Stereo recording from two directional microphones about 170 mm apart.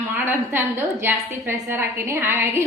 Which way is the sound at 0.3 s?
15° right (ahead or behind).